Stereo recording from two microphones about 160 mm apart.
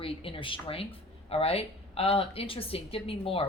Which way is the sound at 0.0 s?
35° left (ahead or behind).